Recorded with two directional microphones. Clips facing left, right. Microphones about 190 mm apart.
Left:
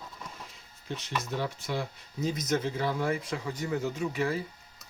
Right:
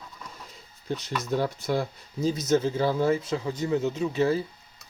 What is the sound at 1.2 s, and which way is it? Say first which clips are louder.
Speech: right 6 dB; 40° right (ahead or behind).